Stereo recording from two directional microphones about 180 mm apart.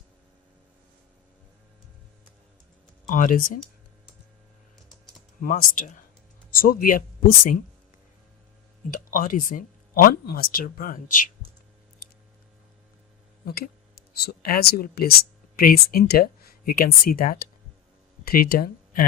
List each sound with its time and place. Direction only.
3.1 s speech: 50° left (ahead or behind)
5.4 s speech: 50° left (ahead or behind)
8.9 s speech: 50° left (ahead or behind)
12.0 s a sound: 55° left (ahead or behind)
13.4 s speech: 60° left (ahead or behind)